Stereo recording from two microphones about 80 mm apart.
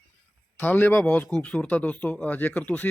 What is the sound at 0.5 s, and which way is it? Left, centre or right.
Speech, left.